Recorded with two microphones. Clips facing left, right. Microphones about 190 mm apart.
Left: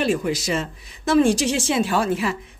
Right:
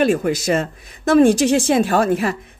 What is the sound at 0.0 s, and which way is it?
A woman's voice, 50° right (ahead or behind).